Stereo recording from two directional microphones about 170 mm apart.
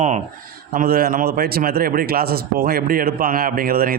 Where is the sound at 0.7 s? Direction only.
55° right (ahead or behind).